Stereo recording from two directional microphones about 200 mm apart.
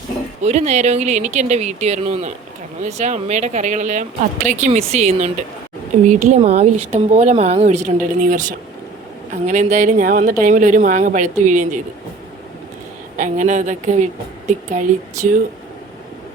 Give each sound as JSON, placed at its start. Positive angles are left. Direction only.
{"t": 0.4, "sound": "speech", "side_deg": -35}
{"t": 13.1, "sound": "speech", "side_deg": -40}